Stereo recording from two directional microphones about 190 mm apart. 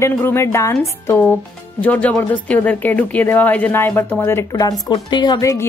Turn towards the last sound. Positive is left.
turn(degrees=20)  # may be behind; listen again after turning